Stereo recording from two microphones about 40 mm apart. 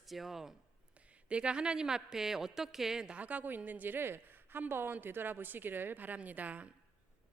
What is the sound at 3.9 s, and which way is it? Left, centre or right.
A woman's voice, right.